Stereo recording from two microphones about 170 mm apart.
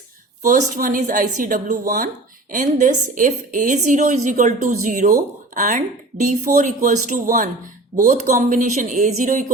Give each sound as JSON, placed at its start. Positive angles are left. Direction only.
{"t": 0.4, "sound": "a woman's voice", "side_deg": -45}